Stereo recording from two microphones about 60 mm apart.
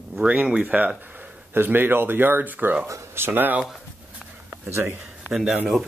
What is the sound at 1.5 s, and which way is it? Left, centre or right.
Speech, right.